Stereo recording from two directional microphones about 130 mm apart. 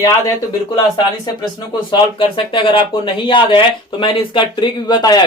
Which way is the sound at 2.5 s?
40° left (ahead or behind).